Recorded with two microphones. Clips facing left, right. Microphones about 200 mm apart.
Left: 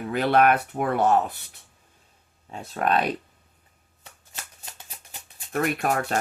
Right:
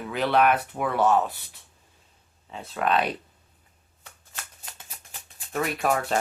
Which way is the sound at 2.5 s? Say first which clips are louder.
Left 1 dB; 45° left (ahead or behind).